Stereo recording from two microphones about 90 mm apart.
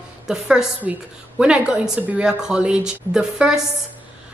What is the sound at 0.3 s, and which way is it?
A woman's voice, 5° right (ahead or behind).